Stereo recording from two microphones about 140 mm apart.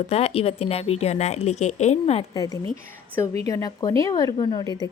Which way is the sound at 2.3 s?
25° left (ahead or behind).